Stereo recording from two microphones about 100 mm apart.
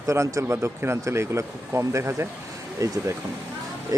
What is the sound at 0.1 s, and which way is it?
A man's voice, 30° right (ahead or behind).